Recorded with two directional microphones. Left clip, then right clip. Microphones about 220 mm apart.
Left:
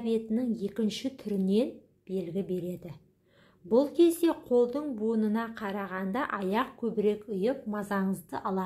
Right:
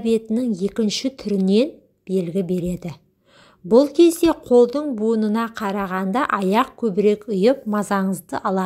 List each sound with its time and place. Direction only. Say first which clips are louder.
0.0 s a woman's voice: right 10 dB; 30° right (ahead or behind)